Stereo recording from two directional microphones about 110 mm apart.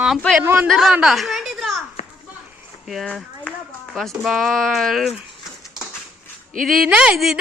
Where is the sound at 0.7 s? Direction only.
Centre (ahead or behind).